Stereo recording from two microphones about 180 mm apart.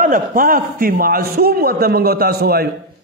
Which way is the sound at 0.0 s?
50° right (ahead or behind).